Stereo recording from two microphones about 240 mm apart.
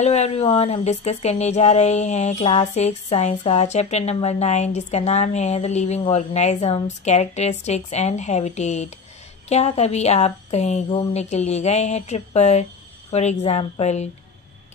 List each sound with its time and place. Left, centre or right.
0.0 s speech: left